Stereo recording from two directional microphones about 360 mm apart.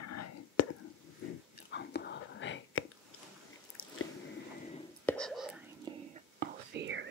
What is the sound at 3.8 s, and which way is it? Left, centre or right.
Biting, left.